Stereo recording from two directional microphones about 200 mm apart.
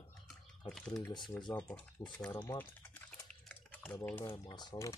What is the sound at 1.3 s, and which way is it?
Speech, 15° left (ahead or behind).